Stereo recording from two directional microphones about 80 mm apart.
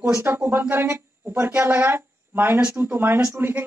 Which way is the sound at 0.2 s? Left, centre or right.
Right.